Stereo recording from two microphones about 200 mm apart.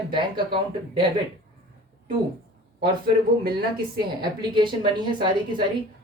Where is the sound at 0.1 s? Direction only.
25° right (ahead or behind).